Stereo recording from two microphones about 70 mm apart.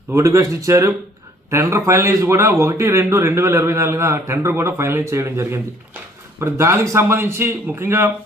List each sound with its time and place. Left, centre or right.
0.1 s a man's voice: right